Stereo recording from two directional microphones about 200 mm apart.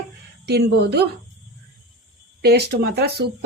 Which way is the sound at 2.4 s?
50° right (ahead or behind).